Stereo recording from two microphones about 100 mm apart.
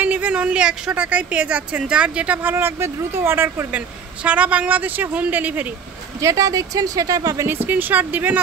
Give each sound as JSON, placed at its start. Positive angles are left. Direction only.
{"t": 0.0, "sound": "a woman's voice", "side_deg": -15}
{"t": 3.7, "sound": "a woman's voice", "side_deg": -15}
{"t": 6.2, "sound": "speech", "side_deg": -35}
{"t": 7.4, "sound": "a woman's voice", "side_deg": -20}